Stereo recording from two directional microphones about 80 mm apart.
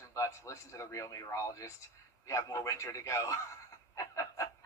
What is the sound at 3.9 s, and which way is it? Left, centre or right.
Snicker, left.